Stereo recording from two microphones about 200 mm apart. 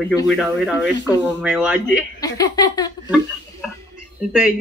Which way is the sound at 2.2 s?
20° left (ahead or behind).